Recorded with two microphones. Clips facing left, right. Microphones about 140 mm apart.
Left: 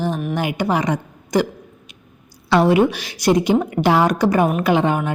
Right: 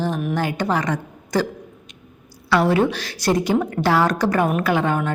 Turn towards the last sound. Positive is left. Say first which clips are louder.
# left 3 dB
turn(degrees=15)  # may be behind; listen again after turning